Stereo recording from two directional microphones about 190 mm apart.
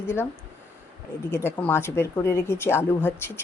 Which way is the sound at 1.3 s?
10° left (ahead or behind).